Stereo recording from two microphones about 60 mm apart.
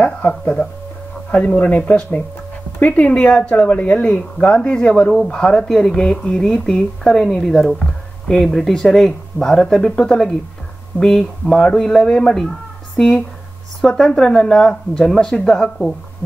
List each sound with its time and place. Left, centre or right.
0.0 s speech: left